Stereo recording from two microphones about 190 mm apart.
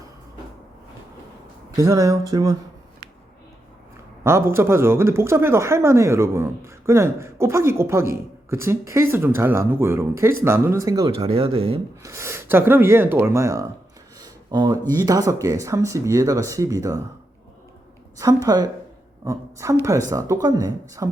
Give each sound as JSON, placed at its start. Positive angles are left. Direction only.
{"t": 1.7, "sound": "a woman's voice", "side_deg": -15}
{"t": 4.2, "sound": "a woman's voice", "side_deg": -15}
{"t": 11.3, "sound": "speech", "side_deg": -30}
{"t": 12.0, "sound": "a woman's voice", "side_deg": -15}
{"t": 18.4, "sound": "a woman's voice", "side_deg": -20}